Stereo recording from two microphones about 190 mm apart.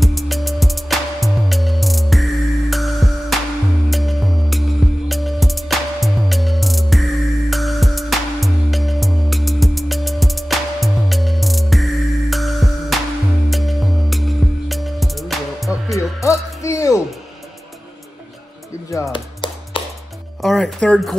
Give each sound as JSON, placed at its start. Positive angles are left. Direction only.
{"t": 0.0, "sound": "music", "side_deg": 0}
{"t": 16.0, "sound": "music", "side_deg": 15}
{"t": 19.1, "sound": "music", "side_deg": 25}
{"t": 20.4, "sound": "music", "side_deg": 5}